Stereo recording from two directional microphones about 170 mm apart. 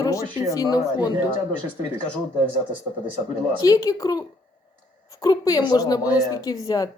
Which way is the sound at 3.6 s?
20° left (ahead or behind).